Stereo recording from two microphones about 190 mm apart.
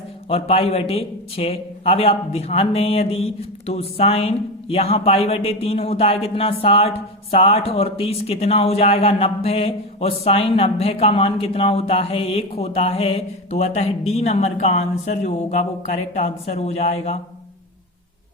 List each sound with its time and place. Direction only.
0.3 s a man's voice: 30° left (ahead or behind)